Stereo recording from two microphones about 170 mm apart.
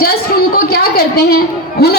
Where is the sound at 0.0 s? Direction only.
60° left (ahead or behind).